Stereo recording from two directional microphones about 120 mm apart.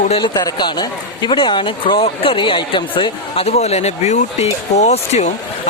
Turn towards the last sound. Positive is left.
turn(degrees=65)  # may be behind; listen again after turning